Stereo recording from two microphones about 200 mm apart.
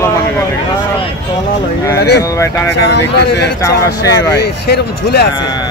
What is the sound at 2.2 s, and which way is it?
Speech, 15° left (ahead or behind).